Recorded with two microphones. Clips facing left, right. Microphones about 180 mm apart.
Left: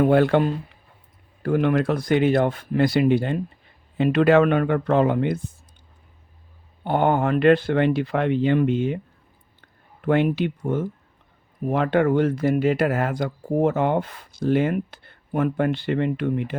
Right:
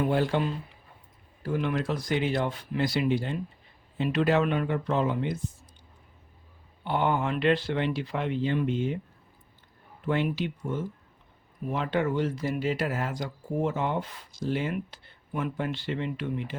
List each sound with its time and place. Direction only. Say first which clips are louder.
0.0 s speech: left 8 dB; 60° left (ahead or behind)
6.8 s speech: left 6 dB; 50° left (ahead or behind); by 9.0 s 65° left (ahead or behind)
10.0 s speech: left 8 dB; 60° left (ahead or behind)